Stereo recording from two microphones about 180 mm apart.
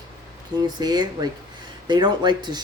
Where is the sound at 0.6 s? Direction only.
20° right (ahead or behind).